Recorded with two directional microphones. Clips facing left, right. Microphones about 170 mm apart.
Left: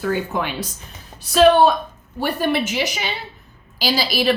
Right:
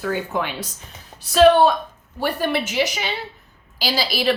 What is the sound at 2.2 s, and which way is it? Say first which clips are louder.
A woman's voice: left 2 dB; 15° left (ahead or behind).